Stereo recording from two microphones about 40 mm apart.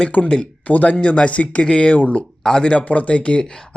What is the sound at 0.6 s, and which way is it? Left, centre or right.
A man's voice, left.